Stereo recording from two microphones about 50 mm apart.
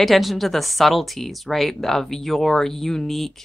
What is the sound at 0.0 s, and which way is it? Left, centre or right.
Speech, centre.